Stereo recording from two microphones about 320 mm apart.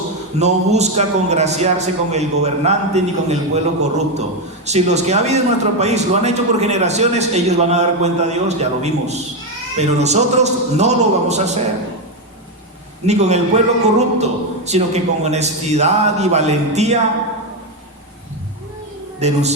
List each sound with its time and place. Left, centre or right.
0.3 s a man's voice: right
13.1 s a man's voice: right
19.2 s a man's voice: right